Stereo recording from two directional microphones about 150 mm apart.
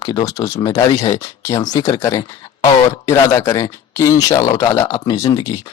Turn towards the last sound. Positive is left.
turn(degrees=20)  # may be behind; listen again after turning